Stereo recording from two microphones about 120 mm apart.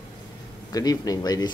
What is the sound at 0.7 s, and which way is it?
Speech, 30° left (ahead or behind).